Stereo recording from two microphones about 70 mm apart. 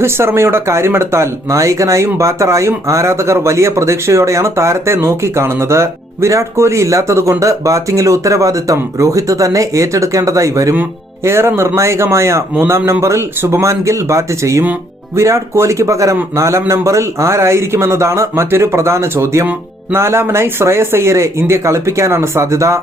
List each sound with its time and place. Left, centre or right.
0.0 s speech: right